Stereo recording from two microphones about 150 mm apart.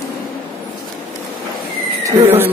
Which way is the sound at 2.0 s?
15° right (ahead or behind).